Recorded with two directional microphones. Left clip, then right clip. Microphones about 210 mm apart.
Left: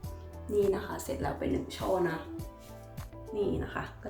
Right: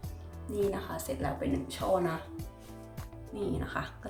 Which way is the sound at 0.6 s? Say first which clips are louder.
Left 1 dB; 5° right (ahead or behind).